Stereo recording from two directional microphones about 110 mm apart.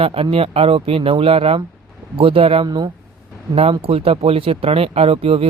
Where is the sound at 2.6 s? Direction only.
40° right (ahead or behind).